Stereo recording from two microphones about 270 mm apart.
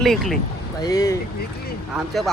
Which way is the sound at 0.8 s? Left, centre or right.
Centre.